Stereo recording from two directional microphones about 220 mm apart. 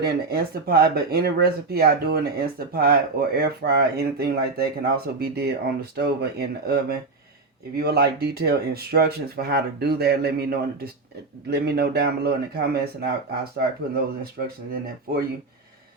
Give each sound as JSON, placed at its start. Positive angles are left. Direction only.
{"t": 0.0, "sound": "speech", "side_deg": -45}